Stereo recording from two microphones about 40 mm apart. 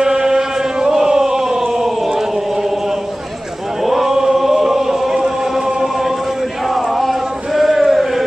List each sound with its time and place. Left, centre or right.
0.0 s chant: centre
3.8 s chant: centre
6.7 s a sound: centre